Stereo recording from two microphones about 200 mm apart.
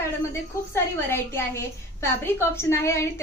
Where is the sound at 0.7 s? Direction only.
10° left (ahead or behind).